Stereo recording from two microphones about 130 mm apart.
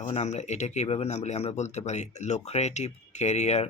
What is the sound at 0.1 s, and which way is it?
Speech, 65° left (ahead or behind).